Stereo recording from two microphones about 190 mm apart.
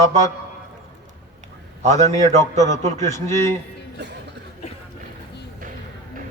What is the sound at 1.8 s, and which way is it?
A man's voice, 35° right (ahead or behind).